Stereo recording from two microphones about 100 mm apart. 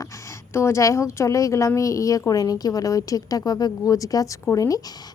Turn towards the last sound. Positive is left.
turn(degrees=35)  # may be behind; listen again after turning